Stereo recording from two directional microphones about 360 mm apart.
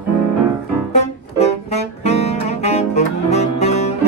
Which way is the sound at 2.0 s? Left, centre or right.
Centre.